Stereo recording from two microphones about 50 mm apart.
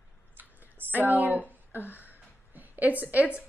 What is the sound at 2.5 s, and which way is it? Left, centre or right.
Speech, right.